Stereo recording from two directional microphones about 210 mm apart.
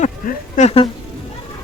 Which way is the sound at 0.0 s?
35° left (ahead or behind).